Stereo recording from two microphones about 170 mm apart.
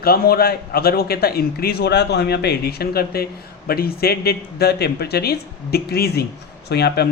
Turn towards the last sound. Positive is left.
turn(degrees=70)  # may be behind; listen again after turning